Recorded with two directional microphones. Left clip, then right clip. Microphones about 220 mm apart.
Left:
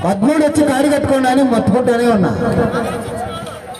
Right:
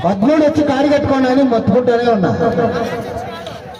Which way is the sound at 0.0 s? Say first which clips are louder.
Right 1 dB; 50° left (ahead or behind).